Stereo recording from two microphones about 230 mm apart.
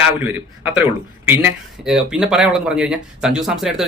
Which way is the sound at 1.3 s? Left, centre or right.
Centre.